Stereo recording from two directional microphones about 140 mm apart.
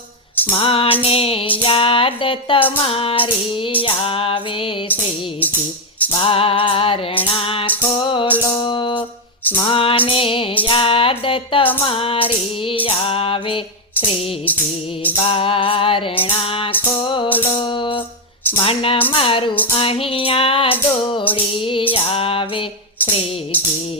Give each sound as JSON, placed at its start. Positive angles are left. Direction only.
{"t": 0.5, "sound": "music", "side_deg": 40}
{"t": 6.1, "sound": "music", "side_deg": 40}
{"t": 15.1, "sound": "music", "side_deg": 40}
{"t": 18.6, "sound": "speech", "side_deg": 45}
{"t": 19.1, "sound": "music", "side_deg": 40}